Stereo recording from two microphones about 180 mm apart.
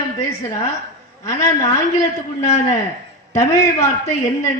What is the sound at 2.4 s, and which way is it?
Speech, 40° left (ahead or behind).